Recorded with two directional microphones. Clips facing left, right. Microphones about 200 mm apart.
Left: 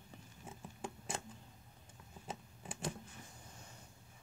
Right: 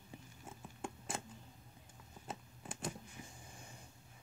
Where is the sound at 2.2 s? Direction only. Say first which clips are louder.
Even; centre (ahead or behind).